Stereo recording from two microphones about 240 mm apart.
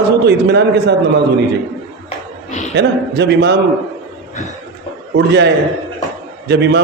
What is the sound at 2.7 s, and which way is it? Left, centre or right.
Speech, right.